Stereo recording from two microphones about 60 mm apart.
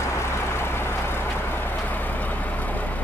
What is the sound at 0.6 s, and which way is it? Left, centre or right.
Vehicle, left.